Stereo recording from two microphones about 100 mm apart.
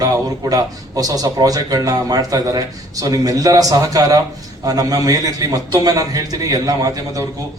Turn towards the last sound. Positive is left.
turn(degrees=-40)  # may be behind; listen again after turning